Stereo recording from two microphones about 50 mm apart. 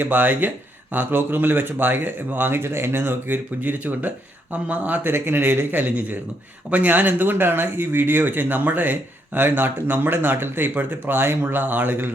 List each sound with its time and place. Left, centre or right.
0.0 s speech: right
5.1 s speech: right
5.7 s speech: right